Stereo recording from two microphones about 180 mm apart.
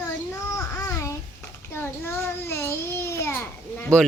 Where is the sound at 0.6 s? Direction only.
15° left (ahead or behind).